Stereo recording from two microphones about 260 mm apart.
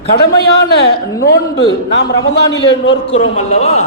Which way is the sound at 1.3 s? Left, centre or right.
Left.